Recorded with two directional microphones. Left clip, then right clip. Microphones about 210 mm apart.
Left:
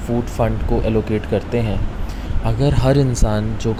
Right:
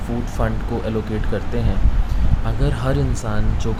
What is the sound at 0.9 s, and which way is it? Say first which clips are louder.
Speech: left 6 dB; 15° left (ahead or behind).